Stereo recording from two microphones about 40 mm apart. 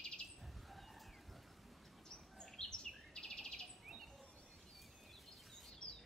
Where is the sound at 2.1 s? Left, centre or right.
Centre.